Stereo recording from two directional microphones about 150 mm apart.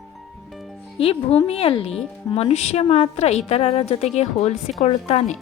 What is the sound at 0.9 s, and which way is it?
A woman's voice, 40° left (ahead or behind).